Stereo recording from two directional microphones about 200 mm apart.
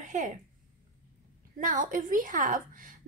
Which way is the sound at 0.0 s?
40° right (ahead or behind).